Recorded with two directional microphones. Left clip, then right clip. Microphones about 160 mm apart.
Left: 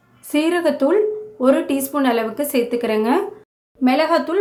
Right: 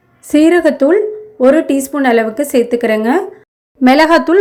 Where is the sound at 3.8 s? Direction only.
45° right (ahead or behind).